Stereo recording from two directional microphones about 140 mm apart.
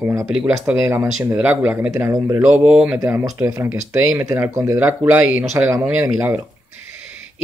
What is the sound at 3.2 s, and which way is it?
Speech, 20° right (ahead or behind).